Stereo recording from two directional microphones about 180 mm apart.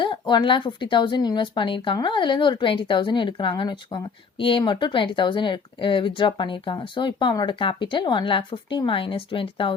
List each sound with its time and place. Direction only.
0.0 s speech: 25° left (ahead or behind)